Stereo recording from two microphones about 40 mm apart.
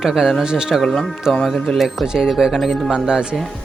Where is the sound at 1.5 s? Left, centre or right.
Left.